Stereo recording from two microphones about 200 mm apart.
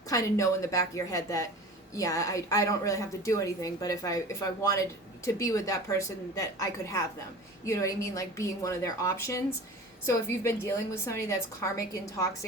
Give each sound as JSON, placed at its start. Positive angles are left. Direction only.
{"t": 0.1, "sound": "a woman's voice", "side_deg": 15}